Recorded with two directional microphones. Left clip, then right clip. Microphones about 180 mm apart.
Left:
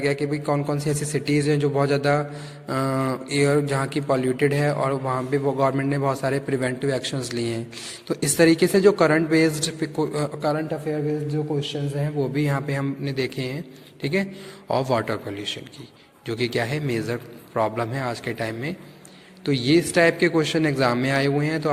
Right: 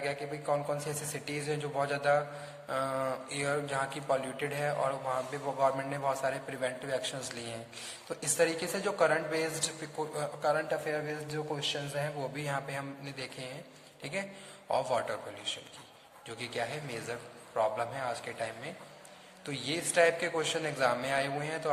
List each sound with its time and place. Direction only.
0.0 s a man's voice: 35° left (ahead or behind)